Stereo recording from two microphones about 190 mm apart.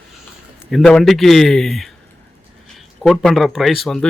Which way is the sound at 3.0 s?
Centre (ahead or behind).